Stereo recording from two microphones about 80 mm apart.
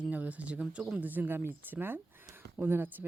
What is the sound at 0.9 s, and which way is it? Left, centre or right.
Speech, right.